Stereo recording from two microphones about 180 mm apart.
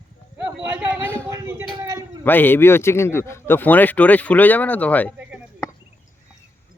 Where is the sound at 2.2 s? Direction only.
10° left (ahead or behind).